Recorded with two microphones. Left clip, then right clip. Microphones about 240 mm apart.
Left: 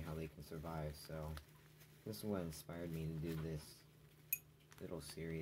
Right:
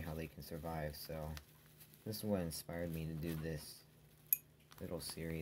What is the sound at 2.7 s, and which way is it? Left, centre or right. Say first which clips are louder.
Speech: right 6 dB; right.